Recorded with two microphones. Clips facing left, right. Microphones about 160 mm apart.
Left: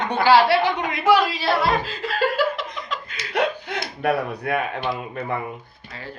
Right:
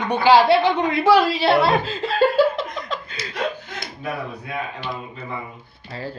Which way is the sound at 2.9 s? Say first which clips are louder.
Right 2 dB; 30° right (ahead or behind).